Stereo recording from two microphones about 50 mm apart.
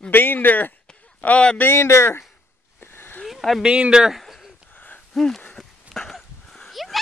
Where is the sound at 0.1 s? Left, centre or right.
Left.